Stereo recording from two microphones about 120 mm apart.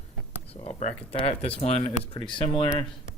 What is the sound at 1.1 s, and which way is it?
Speech, 55° left (ahead or behind).